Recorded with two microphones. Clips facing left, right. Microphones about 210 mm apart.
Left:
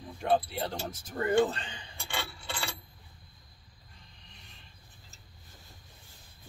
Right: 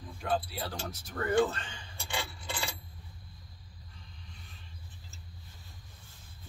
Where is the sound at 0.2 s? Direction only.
20° left (ahead or behind).